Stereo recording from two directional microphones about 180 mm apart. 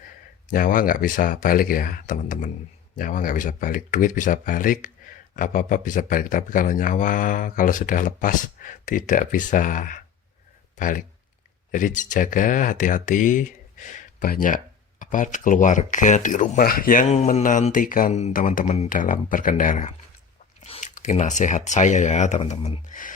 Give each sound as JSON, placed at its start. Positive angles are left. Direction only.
{"t": 0.5, "sound": "speech", "side_deg": 50}
{"t": 20.6, "sound": "chewing", "side_deg": 35}
{"t": 20.9, "sound": "speech", "side_deg": 40}
{"t": 22.9, "sound": "speech", "side_deg": 45}